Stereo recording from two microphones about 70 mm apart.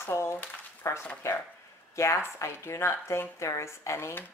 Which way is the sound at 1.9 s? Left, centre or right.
Left.